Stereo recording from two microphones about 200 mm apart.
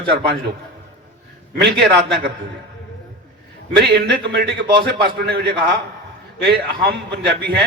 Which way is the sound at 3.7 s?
55° right (ahead or behind).